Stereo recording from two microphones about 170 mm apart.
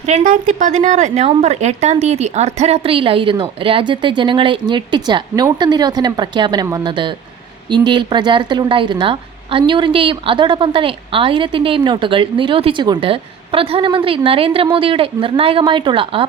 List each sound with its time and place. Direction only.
0.0 s a woman's voice: 40° right (ahead or behind)